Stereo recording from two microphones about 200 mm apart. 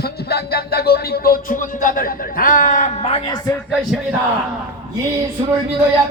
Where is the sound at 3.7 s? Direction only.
Centre (ahead or behind).